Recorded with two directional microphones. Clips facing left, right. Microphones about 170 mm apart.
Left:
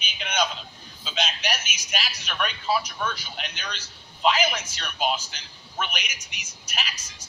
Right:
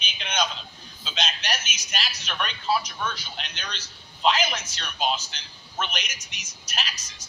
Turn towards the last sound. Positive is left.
turn(degrees=10)  # may be behind; listen again after turning